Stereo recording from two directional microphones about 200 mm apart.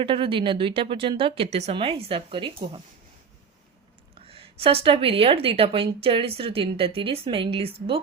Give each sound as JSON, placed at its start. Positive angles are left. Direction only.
{"t": 0.0, "sound": "a woman's voice", "side_deg": -25}
{"t": 4.3, "sound": "a woman's voice", "side_deg": -30}